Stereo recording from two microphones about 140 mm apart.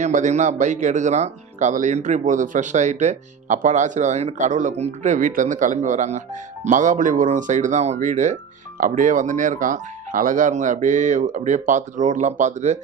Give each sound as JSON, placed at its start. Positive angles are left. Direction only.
{"t": 0.0, "sound": "speech", "side_deg": -60}